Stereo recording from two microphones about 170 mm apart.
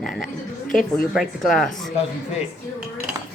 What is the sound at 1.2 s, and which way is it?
Speech, centre (ahead or behind).